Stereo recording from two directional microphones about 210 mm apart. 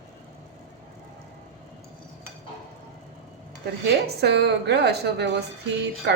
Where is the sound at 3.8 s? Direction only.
50° right (ahead or behind).